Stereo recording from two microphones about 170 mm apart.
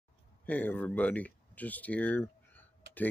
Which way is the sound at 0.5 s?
10° left (ahead or behind).